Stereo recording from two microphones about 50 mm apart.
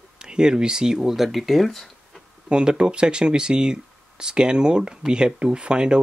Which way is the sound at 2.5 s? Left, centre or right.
Centre.